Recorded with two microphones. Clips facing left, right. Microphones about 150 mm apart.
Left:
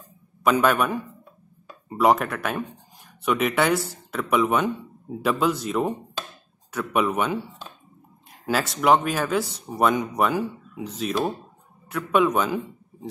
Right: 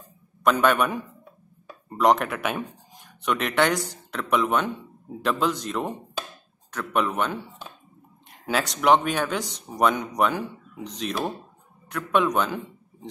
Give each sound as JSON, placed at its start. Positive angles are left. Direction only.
{"t": 0.4, "sound": "a man's voice", "side_deg": 5}